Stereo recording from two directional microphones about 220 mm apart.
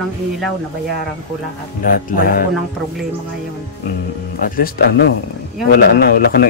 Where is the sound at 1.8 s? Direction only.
40° left (ahead or behind).